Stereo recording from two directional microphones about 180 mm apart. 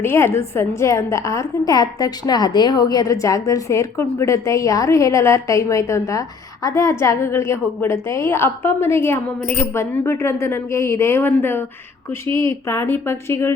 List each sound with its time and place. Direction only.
0.0 s a woman's voice: 15° left (ahead or behind)